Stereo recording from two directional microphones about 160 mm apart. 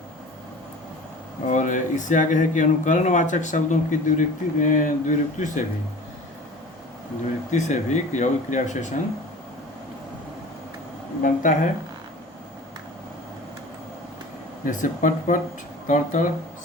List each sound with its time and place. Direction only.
1.5 s speech: 50° left (ahead or behind)
7.5 s speech: 50° left (ahead or behind)
11.2 s speech: 55° left (ahead or behind)
14.6 s speech: 55° left (ahead or behind)